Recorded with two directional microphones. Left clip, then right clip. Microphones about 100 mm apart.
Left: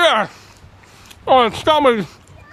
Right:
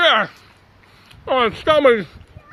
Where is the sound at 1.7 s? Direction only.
35° left (ahead or behind).